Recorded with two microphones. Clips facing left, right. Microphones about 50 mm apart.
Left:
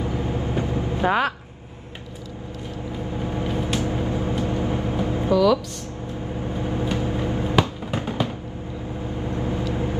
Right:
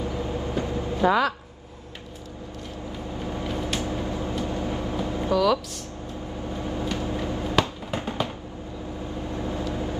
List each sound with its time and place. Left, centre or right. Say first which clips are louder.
0.0 s vehicle: left 3 dB; left
3.2 s vehicle: left 3 dB; left
6.5 s a sound: left 3 dB; left
7.9 s music: left 2 dB; left
9.3 s vehicle: left 3 dB; left